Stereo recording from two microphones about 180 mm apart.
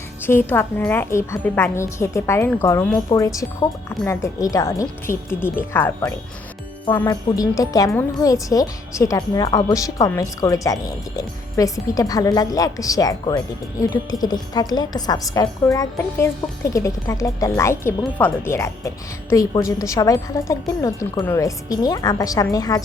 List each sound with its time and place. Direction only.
0.2 s a woman's voice: 10° left (ahead or behind)